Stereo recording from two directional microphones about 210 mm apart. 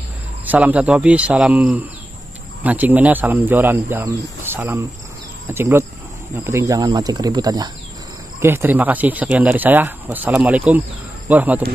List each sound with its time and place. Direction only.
0.5 s a man's voice: 5° right (ahead or behind)